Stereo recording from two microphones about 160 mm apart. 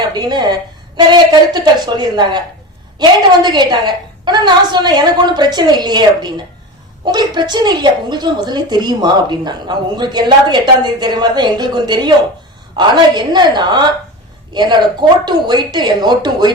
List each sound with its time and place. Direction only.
0.0 s a woman's voice: 25° right (ahead or behind)